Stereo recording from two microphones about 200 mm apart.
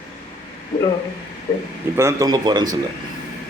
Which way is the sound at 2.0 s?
15° right (ahead or behind).